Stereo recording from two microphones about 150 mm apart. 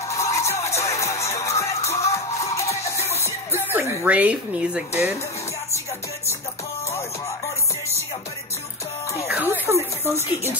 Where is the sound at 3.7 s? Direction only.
10° right (ahead or behind).